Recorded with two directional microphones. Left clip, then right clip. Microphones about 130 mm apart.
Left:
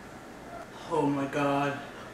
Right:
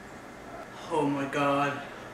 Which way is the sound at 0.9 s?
5° right (ahead or behind).